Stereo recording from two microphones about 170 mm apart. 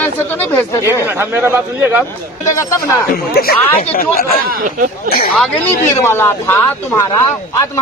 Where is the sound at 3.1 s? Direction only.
60° left (ahead or behind).